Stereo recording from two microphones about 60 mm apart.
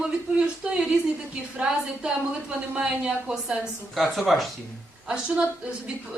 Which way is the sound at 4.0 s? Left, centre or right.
Centre.